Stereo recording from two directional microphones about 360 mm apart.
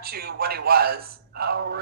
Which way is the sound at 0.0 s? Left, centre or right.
Right.